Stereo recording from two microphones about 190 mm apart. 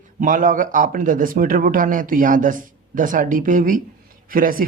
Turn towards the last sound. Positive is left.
turn(degrees=-50)  # may be behind; listen again after turning